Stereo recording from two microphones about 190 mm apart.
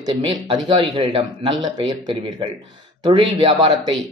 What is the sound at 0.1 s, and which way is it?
Speech, 30° right (ahead or behind).